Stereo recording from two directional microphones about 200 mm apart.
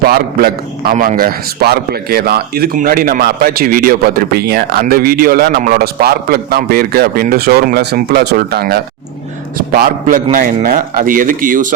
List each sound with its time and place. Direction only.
0.0 s a man's voice: 50° right (ahead or behind)